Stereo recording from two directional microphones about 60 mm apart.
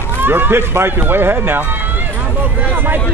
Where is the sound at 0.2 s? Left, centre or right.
Right.